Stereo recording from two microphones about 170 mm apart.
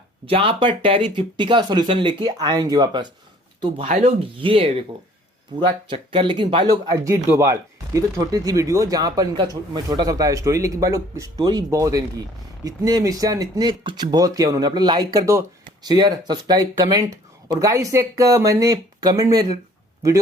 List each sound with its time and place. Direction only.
0.3 s speech: 30° right (ahead or behind)
3.8 s speech: 40° right (ahead or behind); by 19.5 s 20° right (ahead or behind)